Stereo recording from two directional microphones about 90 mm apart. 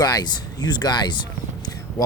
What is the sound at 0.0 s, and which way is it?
Speech, 45° left (ahead or behind).